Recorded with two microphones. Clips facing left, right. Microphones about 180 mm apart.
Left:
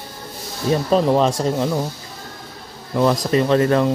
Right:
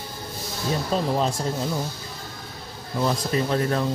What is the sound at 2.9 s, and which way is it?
Speech, 80° left.